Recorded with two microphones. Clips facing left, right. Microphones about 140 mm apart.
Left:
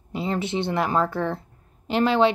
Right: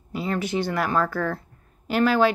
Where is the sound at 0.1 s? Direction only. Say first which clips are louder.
Even; 25° left (ahead or behind).